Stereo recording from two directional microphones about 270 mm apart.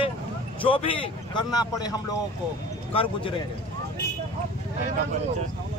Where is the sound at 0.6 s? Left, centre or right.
Centre.